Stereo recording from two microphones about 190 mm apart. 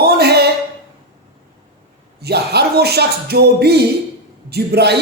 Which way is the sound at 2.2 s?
60° right (ahead or behind).